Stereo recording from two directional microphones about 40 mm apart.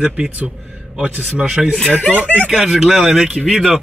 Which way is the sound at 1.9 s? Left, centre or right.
Left.